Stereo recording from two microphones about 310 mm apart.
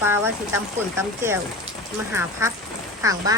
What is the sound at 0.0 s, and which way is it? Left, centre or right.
Speech, centre.